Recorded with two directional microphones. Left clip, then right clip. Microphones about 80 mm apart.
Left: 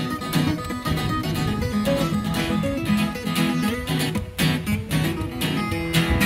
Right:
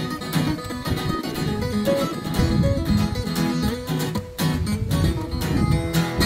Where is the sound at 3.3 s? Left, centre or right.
Left.